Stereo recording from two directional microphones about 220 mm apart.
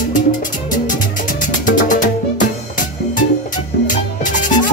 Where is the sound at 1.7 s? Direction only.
35° left (ahead or behind).